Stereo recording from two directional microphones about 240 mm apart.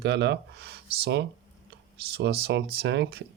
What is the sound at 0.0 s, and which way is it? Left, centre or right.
Speech, right.